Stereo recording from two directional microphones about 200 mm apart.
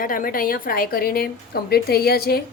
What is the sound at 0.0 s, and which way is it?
A woman's voice, 45° left (ahead or behind).